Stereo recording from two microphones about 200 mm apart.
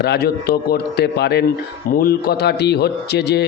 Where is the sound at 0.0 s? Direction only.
55° left (ahead or behind).